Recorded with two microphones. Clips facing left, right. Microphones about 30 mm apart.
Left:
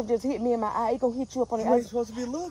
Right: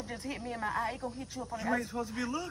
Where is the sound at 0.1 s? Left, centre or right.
Right.